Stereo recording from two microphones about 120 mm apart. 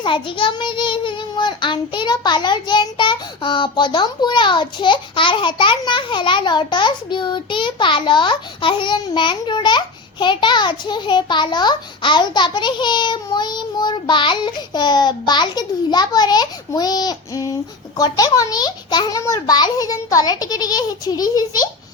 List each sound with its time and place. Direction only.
0.0 s a child's voice: 45° left (ahead or behind)